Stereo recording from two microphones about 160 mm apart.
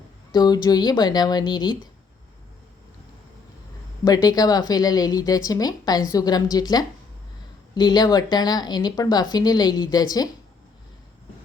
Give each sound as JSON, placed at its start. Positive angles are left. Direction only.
{"t": 0.3, "sound": "a woman's voice", "side_deg": 25}
{"t": 4.0, "sound": "a woman's voice", "side_deg": 25}